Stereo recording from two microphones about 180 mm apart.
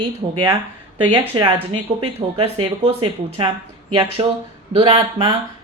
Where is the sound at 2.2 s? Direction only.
30° right (ahead or behind).